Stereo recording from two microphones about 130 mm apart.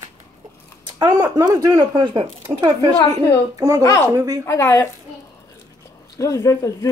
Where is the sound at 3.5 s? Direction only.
20° right (ahead or behind).